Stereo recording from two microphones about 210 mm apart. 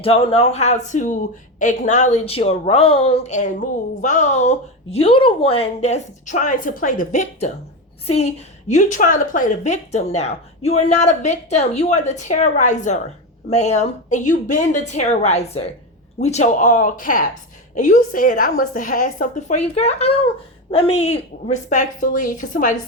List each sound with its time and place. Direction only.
0.0 s a woman's voice: 25° left (ahead or behind)